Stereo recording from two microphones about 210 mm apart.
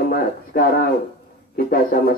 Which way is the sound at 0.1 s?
45° left (ahead or behind).